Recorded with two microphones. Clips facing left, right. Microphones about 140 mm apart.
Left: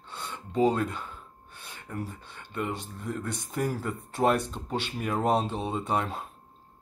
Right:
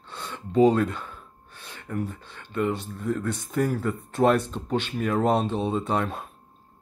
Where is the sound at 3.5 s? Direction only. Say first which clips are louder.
Right 5 dB; 10° left (ahead or behind).